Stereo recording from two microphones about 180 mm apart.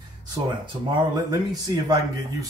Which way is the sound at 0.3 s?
25° right (ahead or behind).